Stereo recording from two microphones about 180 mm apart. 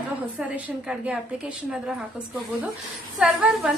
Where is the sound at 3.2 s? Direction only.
5° right (ahead or behind).